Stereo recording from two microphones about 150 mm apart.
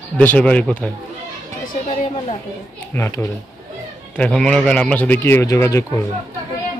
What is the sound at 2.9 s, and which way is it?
Speech, 15° left (ahead or behind).